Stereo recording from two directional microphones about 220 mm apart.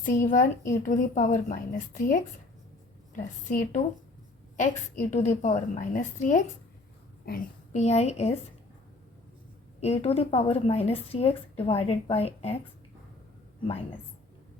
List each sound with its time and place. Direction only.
0.0 s a woman's voice: 40° left (ahead or behind)
3.5 s a woman's voice: 35° left (ahead or behind)
9.8 s a woman's voice: 30° left (ahead or behind)